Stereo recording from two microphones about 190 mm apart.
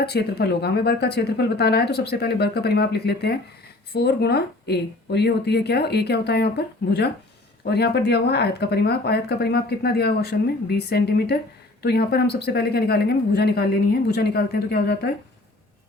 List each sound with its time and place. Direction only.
0.0 s speech: 55° left (ahead or behind)